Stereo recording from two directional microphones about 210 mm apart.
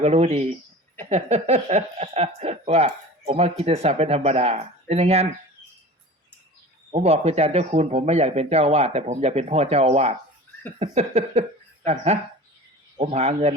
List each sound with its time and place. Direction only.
0.0 s speech: 30° right (ahead or behind)
6.9 s speech: 30° right (ahead or behind)